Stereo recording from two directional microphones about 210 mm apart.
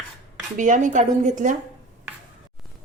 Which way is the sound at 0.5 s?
35° right (ahead or behind).